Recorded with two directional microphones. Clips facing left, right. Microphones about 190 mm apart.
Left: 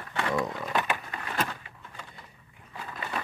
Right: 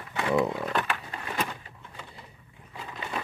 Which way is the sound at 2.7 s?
15° right (ahead or behind).